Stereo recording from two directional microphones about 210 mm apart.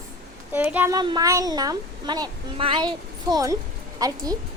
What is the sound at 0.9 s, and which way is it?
A child's voice, 20° right (ahead or behind).